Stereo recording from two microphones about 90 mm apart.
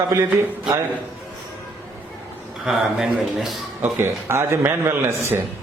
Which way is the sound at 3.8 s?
25° right (ahead or behind).